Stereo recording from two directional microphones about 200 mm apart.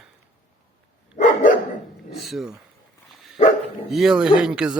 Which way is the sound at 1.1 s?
40° left (ahead or behind).